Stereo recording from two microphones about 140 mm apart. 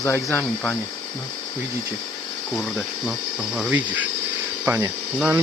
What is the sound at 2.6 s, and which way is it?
Speech, centre (ahead or behind).